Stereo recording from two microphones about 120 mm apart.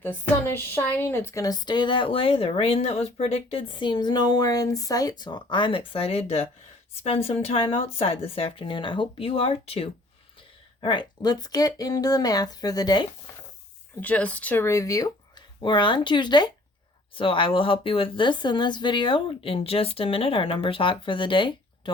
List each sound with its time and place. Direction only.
0.0 s a woman's voice: 15° left (ahead or behind)
1.5 s speech: 40° left (ahead or behind); by 9.9 s 55° left (ahead or behind)
10.8 s speech: 45° left (ahead or behind)
14.0 s a woman's voice: 10° left (ahead or behind); by 15.1 s 25° left (ahead or behind)
15.4 s speech: 40° left (ahead or behind)